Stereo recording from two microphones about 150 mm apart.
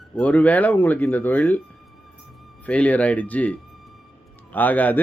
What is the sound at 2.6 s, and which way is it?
Speech, 10° left (ahead or behind).